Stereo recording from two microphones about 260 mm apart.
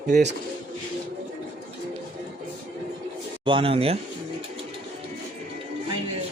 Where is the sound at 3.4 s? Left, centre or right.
Right.